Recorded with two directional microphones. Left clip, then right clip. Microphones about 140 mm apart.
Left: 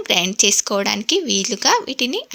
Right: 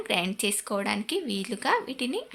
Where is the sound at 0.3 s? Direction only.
50° left (ahead or behind).